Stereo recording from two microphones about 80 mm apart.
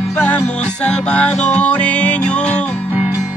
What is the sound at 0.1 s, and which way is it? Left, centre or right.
Music, centre.